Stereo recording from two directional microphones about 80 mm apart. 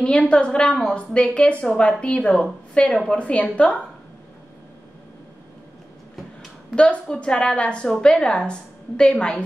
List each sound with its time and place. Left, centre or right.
0.0 s a woman's voice: centre
6.7 s a woman's voice: centre